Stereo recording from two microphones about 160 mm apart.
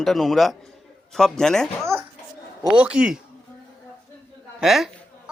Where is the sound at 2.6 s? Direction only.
5° right (ahead or behind).